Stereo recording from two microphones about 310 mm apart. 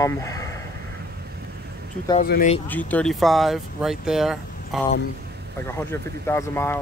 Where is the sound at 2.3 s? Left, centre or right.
Left.